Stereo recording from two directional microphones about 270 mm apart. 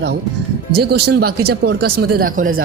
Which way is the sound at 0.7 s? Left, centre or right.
Right.